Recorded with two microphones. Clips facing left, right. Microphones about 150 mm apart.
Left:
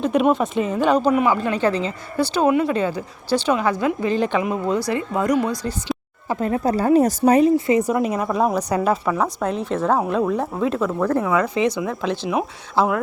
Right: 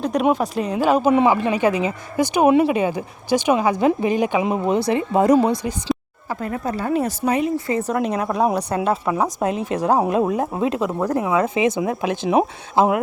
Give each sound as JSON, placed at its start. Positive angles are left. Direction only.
{"t": 0.0, "sound": "speech", "side_deg": 0}
{"t": 1.1, "sound": "speech", "side_deg": -25}
{"t": 1.5, "sound": "a woman's voice", "side_deg": -10}
{"t": 6.2, "sound": "speech", "side_deg": 20}
{"t": 6.7, "sound": "speech", "side_deg": 40}
{"t": 7.7, "sound": "speech", "side_deg": 10}
{"t": 9.1, "sound": "speech", "side_deg": -20}
{"t": 9.5, "sound": "a woman's voice", "side_deg": -5}
{"t": 10.1, "sound": "a woman's voice", "side_deg": -15}